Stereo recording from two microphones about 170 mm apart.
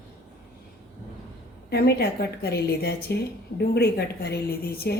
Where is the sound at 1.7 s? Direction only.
70° left (ahead or behind).